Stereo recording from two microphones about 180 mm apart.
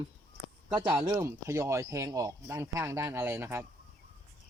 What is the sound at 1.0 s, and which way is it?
Speech, 15° right (ahead or behind).